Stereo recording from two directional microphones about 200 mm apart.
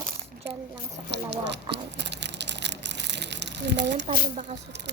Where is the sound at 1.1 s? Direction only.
60° right (ahead or behind).